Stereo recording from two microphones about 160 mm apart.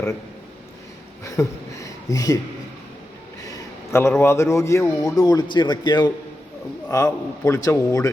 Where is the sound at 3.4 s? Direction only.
20° left (ahead or behind).